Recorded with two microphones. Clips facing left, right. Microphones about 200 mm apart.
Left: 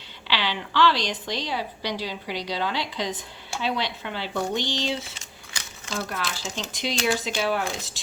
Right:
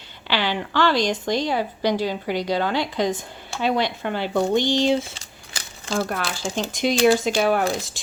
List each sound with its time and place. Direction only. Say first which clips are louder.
0.3 s a woman's voice: right 5 dB; 50° right (ahead or behind)
5.1 s crumpling: right 2 dB; 35° right (ahead or behind)
6.0 s a woman's voice: right 5 dB; 55° right (ahead or behind)